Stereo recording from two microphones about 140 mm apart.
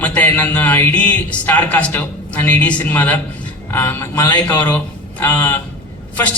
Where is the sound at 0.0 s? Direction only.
10° left (ahead or behind).